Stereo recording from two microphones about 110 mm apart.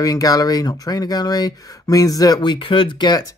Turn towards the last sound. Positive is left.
turn(degrees=40)  # may be behind; listen again after turning